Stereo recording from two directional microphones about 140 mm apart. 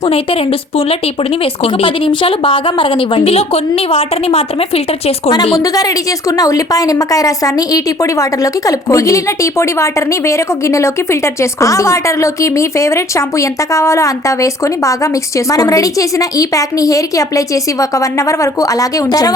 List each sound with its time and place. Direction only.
0.0 s speech: 45° left (ahead or behind)
5.5 s a woman's voice: 25° left (ahead or behind)